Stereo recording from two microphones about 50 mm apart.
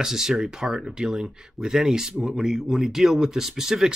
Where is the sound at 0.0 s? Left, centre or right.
Centre.